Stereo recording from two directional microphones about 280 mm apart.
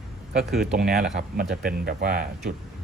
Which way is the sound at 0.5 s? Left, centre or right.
Centre.